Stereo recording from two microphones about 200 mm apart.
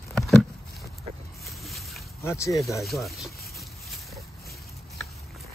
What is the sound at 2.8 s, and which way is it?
Speech, centre (ahead or behind).